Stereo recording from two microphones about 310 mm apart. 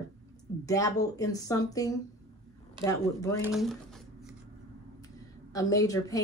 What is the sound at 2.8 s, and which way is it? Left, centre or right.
Speech, centre.